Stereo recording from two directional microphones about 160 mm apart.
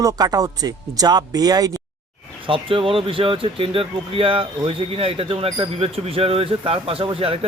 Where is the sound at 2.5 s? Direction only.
35° right (ahead or behind).